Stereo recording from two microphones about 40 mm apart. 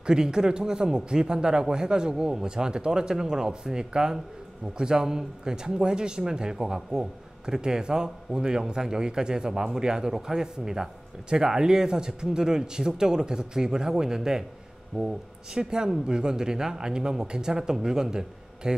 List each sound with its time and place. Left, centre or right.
0.0 s speech: centre